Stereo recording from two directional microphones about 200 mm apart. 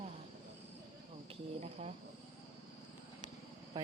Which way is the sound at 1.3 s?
35° right (ahead or behind).